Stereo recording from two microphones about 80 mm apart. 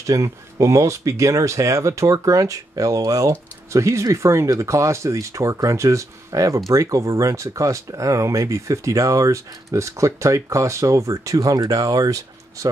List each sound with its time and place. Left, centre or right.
0.0 s speech: right